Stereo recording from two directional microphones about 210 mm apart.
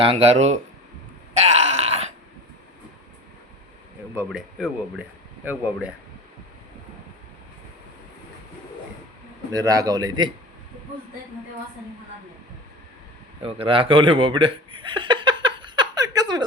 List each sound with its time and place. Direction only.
0.0 s speech: 30° right (ahead or behind)
1.3 s groan: 30° right (ahead or behind)
4.3 s a man's voice: centre (ahead or behind)
9.5 s a man's voice: 15° right (ahead or behind)
13.4 s chuckle: 25° right (ahead or behind)